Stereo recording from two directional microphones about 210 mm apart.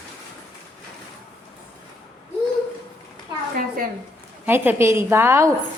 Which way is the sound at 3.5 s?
45° right (ahead or behind).